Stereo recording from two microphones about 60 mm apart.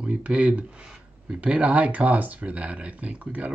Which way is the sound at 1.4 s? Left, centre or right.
Right.